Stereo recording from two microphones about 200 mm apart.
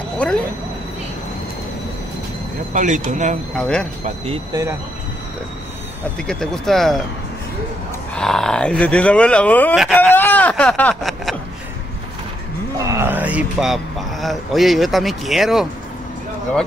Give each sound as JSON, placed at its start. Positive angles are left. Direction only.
{"t": 0.2, "sound": "speech", "side_deg": 5}
{"t": 2.7, "sound": "speech", "side_deg": -40}
{"t": 3.5, "sound": "speech", "side_deg": 5}
{"t": 6.1, "sound": "speech", "side_deg": 5}
{"t": 8.2, "sound": "speech", "side_deg": 5}
{"t": 12.7, "sound": "speech", "side_deg": -15}